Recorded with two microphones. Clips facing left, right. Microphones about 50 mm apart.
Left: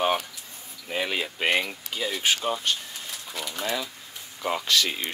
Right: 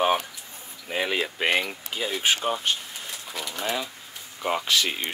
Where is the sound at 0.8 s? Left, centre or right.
Centre.